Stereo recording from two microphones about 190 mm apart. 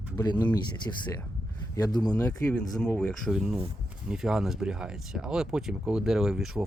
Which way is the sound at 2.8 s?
5° left (ahead or behind).